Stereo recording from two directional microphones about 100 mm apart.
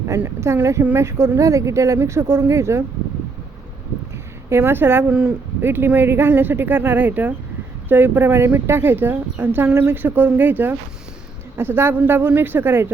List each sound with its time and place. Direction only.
0.2 s speech: 25° right (ahead or behind)
4.4 s speech: 25° right (ahead or behind)